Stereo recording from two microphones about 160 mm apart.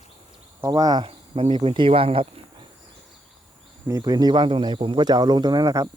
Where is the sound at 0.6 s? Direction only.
25° right (ahead or behind).